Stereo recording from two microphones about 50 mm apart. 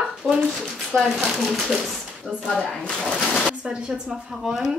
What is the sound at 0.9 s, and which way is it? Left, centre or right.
Speech, centre.